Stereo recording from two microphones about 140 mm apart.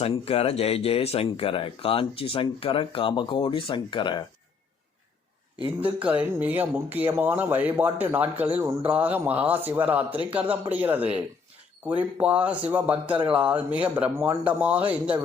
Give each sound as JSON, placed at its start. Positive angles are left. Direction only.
{"t": 0.0, "sound": "speech", "side_deg": 45}
{"t": 5.8, "sound": "speech", "side_deg": -10}
{"t": 12.2, "sound": "speech", "side_deg": -10}